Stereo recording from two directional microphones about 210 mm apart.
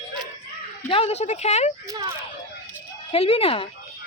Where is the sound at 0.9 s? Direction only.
30° left (ahead or behind).